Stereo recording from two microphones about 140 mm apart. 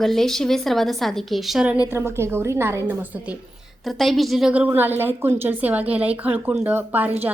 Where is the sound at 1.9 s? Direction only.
20° right (ahead or behind).